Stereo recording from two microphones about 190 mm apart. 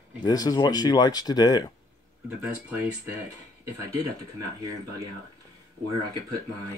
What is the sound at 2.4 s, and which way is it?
Speech, 5° right (ahead or behind).